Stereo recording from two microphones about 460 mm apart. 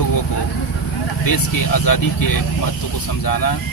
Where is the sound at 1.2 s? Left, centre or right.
Left.